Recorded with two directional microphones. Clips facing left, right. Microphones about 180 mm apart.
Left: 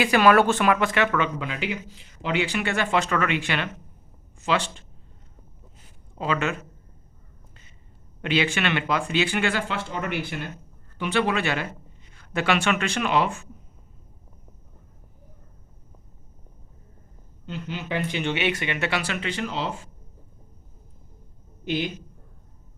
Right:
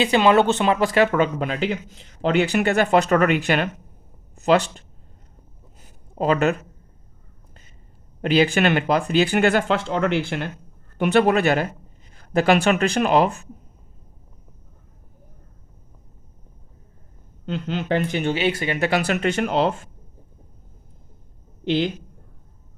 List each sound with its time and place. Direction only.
0.0 s speech: 20° right (ahead or behind); by 4.8 s 40° right (ahead or behind)
6.1 s speech: 40° right (ahead or behind)
8.2 s speech: 40° right (ahead or behind)
9.6 s speech: 70° right (ahead or behind)
10.9 s speech: 45° right (ahead or behind)
17.4 s speech: 60° right (ahead or behind)